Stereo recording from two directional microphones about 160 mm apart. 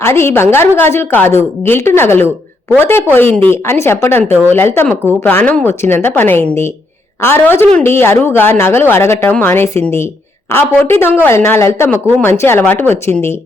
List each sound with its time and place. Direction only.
0.0 s a woman's voice: 15° left (ahead or behind)